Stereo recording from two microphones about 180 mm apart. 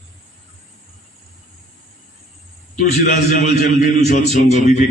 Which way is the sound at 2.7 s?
45° left (ahead or behind).